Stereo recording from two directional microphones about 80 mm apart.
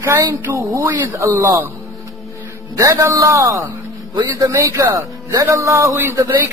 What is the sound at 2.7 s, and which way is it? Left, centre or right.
Speech, right.